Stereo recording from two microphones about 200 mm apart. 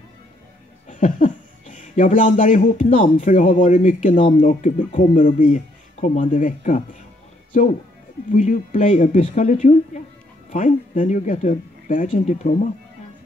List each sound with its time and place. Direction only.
0.8 s speech: 40° left (ahead or behind)
8.3 s speech: 40° left (ahead or behind)